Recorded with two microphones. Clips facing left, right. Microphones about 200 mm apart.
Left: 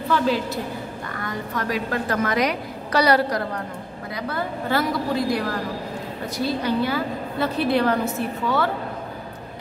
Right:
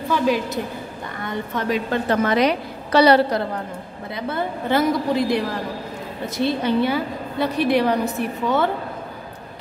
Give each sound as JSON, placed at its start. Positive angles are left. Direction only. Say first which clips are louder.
{"t": 1.2, "sound": "a woman's voice", "louder": "right 3 dB", "side_deg": -25}